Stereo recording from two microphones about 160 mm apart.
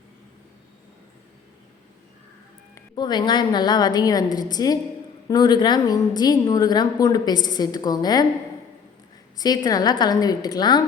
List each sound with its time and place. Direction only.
2.7 s a woman's voice: 25° left (ahead or behind)
9.4 s a woman's voice: 25° left (ahead or behind)